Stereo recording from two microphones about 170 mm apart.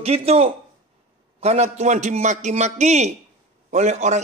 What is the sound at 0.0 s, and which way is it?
A man's voice, 35° right (ahead or behind).